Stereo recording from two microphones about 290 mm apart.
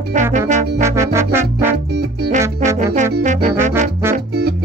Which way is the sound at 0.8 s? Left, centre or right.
Centre.